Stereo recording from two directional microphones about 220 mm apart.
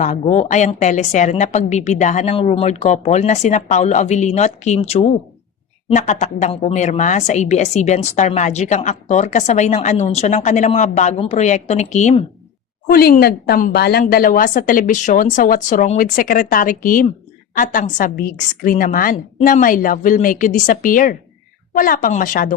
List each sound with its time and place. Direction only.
0.0 s a woman's voice: 30° left (ahead or behind)
12.9 s a woman's voice: 45° left (ahead or behind)